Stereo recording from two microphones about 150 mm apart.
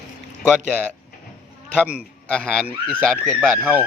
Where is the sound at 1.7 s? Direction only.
10° right (ahead or behind).